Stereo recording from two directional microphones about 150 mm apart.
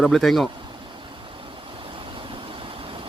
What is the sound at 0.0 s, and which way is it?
Speech, centre (ahead or behind).